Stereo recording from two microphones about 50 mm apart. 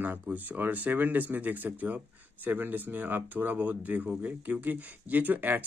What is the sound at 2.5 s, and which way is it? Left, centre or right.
Speech, right.